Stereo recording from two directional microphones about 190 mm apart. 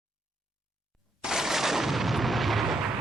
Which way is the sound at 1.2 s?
5° right (ahead or behind).